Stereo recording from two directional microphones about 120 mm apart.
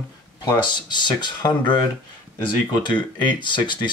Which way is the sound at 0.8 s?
40° left (ahead or behind).